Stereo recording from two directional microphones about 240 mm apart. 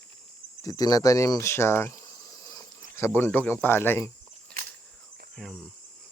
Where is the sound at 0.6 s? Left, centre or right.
Centre.